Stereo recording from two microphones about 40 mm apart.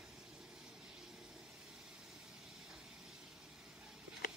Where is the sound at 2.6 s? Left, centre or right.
Centre.